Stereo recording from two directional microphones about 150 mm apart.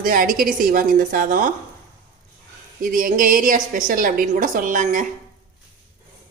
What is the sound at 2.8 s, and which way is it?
A woman's voice, 65° right (ahead or behind).